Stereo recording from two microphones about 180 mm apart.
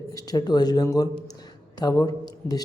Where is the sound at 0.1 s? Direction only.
20° left (ahead or behind).